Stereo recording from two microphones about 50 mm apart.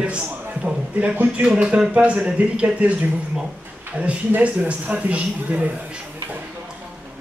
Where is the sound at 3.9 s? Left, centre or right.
Right.